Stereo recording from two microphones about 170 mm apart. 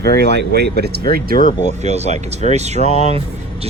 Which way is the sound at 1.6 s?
40° right (ahead or behind).